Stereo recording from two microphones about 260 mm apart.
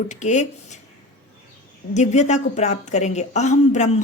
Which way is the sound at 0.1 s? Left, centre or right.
Left.